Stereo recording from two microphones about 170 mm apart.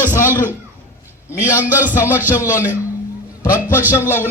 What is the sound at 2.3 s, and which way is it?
A man's voice, 15° left (ahead or behind).